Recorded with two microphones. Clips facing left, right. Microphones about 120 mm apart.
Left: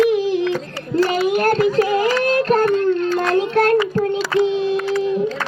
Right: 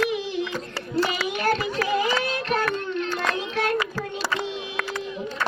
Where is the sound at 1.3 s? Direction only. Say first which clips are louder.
Left 8 dB; 45° left (ahead or behind).